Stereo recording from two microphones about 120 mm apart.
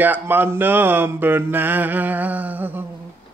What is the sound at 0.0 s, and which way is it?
Speech, 15° right (ahead or behind).